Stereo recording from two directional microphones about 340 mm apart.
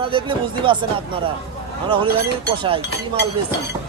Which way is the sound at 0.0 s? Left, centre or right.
Centre.